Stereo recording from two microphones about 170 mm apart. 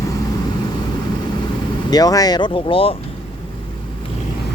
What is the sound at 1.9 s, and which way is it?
Speech, 20° left (ahead or behind).